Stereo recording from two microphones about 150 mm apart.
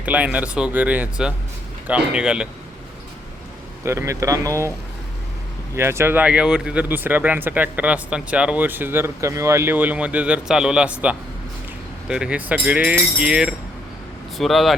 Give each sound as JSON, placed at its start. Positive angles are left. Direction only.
{"t": 0.0, "sound": "speech", "side_deg": -10}
{"t": 3.8, "sound": "speech", "side_deg": -20}
{"t": 5.7, "sound": "speech", "side_deg": -15}